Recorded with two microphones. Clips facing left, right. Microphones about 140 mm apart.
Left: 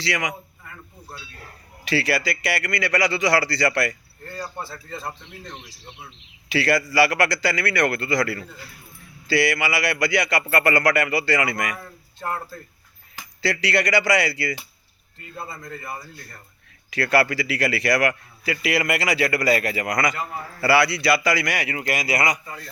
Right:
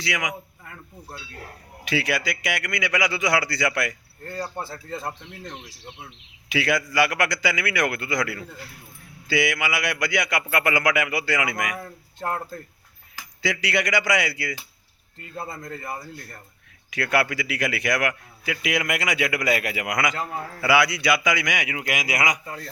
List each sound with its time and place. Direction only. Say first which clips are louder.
0.0 s a man's voice: left 2 dB; centre (ahead or behind)
1.8 s a man's voice: left 2 dB; centre (ahead or behind)
4.4 s speech: right 2 dB; 20° right (ahead or behind)
6.5 s a man's voice: left 3 dB; centre (ahead or behind)
13.4 s a man's voice: left 2 dB; centre (ahead or behind)
15.4 s speech: right 1 dB; 45° right (ahead or behind)
16.9 s a man's voice: left 3 dB; centre (ahead or behind)